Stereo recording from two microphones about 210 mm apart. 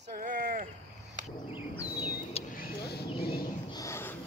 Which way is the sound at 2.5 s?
45° left (ahead or behind).